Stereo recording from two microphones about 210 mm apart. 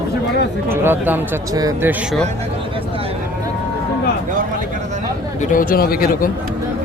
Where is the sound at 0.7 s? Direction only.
10° right (ahead or behind).